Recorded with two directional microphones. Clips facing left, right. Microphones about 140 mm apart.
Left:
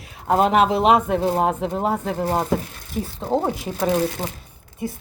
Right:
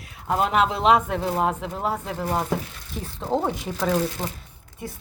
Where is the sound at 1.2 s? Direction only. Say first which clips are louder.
Left 4 dB; 30° left (ahead or behind).